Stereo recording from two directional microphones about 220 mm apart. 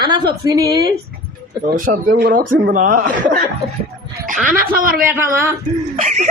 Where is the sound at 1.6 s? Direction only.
40° right (ahead or behind).